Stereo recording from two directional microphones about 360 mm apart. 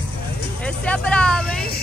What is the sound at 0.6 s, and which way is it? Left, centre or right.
Vehicle, centre.